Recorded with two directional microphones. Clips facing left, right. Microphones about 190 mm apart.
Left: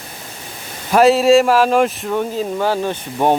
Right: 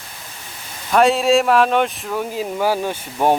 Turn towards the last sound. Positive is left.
turn(degrees=-5)  # may be behind; listen again after turning